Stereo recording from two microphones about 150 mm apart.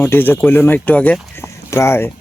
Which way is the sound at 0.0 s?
15° left (ahead or behind).